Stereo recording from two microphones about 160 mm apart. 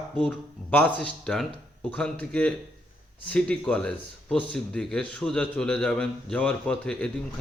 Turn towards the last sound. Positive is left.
turn(degrees=5)  # may be behind; listen again after turning